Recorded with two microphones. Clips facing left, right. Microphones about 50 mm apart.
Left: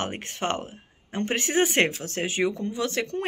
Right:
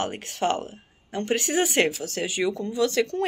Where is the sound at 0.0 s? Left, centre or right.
Left.